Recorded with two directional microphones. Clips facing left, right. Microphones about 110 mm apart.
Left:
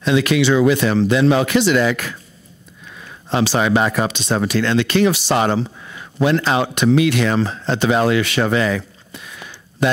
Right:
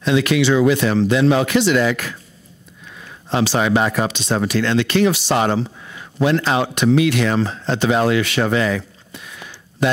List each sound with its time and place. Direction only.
0.0 s speech: 10° left (ahead or behind)
3.5 s speech: 25° left (ahead or behind)
4.1 s speech: 10° left (ahead or behind)
8.4 s a sound: 15° left (ahead or behind)